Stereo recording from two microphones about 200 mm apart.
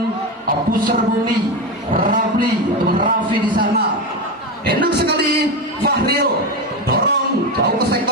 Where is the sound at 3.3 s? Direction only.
25° right (ahead or behind).